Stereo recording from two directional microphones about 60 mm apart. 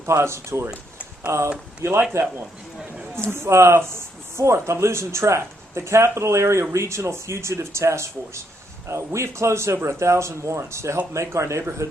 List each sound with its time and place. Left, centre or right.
0.0 s speech: right
3.2 s speech: right